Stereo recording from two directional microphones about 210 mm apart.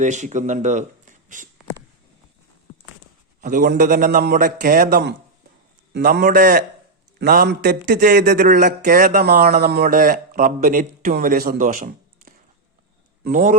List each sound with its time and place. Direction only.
0.0 s speech: 35° right (ahead or behind)
2.7 s a sound: 30° left (ahead or behind)
3.4 s a man's voice: 40° right (ahead or behind)